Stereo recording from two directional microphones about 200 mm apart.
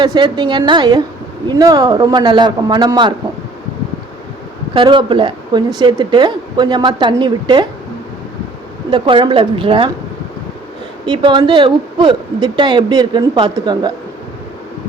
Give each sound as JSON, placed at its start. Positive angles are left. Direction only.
{"t": 0.0, "sound": "speech", "side_deg": -20}
{"t": 4.7, "sound": "speech", "side_deg": -25}
{"t": 8.9, "sound": "speech", "side_deg": -25}
{"t": 11.0, "sound": "speech", "side_deg": -20}